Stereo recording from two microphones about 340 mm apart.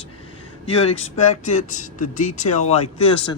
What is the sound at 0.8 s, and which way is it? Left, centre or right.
Speech, centre.